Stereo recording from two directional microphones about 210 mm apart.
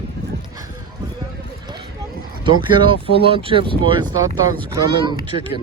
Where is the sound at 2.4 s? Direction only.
25° right (ahead or behind).